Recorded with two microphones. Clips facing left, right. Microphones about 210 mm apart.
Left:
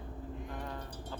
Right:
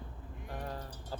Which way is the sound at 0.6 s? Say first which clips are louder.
Even; 35° right (ahead or behind).